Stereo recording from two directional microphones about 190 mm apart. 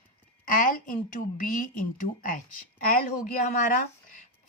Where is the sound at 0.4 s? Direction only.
45° left (ahead or behind).